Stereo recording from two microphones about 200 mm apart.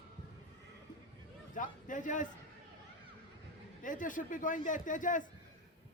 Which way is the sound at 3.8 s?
40° left (ahead or behind).